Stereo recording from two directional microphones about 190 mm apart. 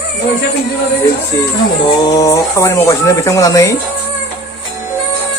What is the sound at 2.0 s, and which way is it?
Speech, 15° left (ahead or behind).